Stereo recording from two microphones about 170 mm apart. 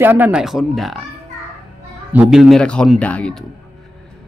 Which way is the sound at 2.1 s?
5° right (ahead or behind).